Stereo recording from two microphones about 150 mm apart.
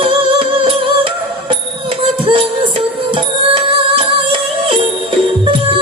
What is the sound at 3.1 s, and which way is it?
Music, 35° right (ahead or behind).